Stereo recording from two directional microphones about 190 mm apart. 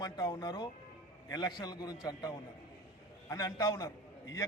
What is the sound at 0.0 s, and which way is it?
A man's voice, 20° left (ahead or behind).